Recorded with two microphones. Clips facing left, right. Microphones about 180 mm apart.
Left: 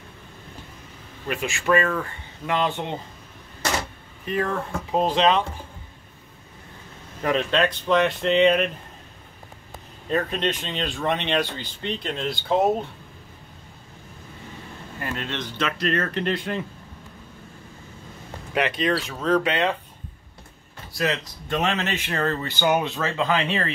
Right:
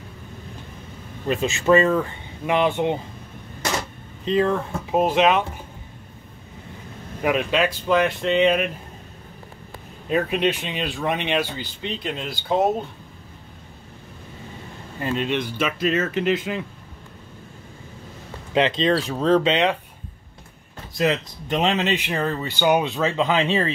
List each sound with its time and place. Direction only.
1.2 s speech: 25° right (ahead or behind)
4.2 s speech: 20° right (ahead or behind)
7.2 s speech: 10° right (ahead or behind)
10.0 s speech: 10° right (ahead or behind)
15.0 s speech: 20° right (ahead or behind); by 16.6 s 5° right (ahead or behind)
18.5 s speech: 25° right (ahead or behind)
21.0 s speech: 20° right (ahead or behind)